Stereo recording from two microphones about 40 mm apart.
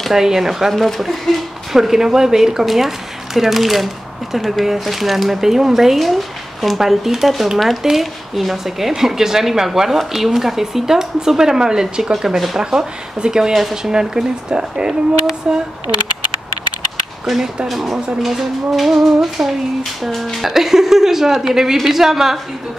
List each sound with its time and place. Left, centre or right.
0.1 s a woman's voice: centre
1.3 s speech: centre
1.7 s a woman's voice: centre
13.9 s speech: centre
17.6 s a woman's voice: centre